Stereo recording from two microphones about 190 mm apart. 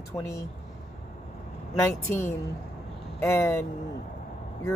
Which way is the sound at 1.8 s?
15° left (ahead or behind).